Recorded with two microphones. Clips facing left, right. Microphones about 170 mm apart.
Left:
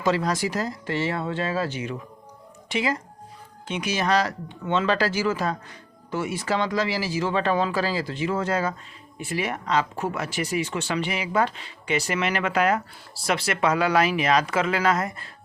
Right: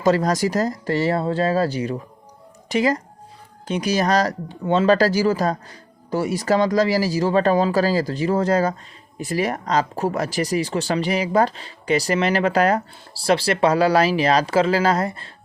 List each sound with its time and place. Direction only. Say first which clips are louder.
0.0 s speech: right 5 dB; 40° right (ahead or behind)